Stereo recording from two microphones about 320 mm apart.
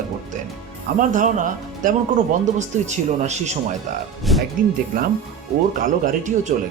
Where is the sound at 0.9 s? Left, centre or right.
Right.